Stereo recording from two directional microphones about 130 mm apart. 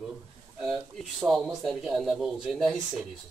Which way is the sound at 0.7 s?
Centre (ahead or behind).